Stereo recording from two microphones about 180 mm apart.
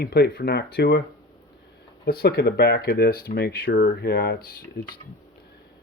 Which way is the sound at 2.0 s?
60° left (ahead or behind).